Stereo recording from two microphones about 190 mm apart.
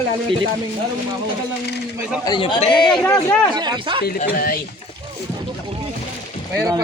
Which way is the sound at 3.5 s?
25° right (ahead or behind).